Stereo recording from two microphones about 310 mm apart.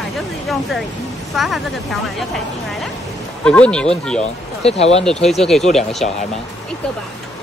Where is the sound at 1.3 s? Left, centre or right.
Centre.